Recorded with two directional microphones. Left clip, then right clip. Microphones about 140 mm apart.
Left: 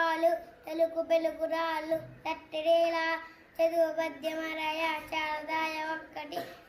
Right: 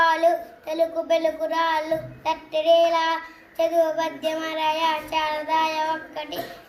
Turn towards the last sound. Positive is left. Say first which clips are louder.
# right 9 dB
turn(degrees=40)  # may be behind; listen again after turning